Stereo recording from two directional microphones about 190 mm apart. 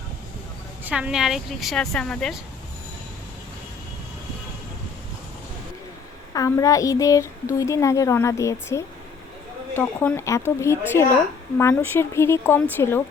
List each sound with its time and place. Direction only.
0.9 s a woman's voice: 5° right (ahead or behind)
6.3 s a woman's voice: 15° left (ahead or behind)